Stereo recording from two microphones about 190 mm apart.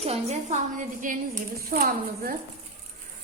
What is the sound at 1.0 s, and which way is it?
A woman's voice, 45° right (ahead or behind).